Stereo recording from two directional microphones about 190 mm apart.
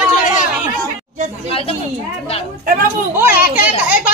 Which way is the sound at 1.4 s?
30° left (ahead or behind).